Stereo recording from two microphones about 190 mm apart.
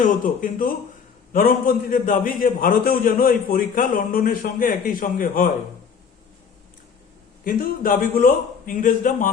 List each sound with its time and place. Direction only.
0.0 s a man's voice: 45° left (ahead or behind)
7.4 s a man's voice: 45° left (ahead or behind)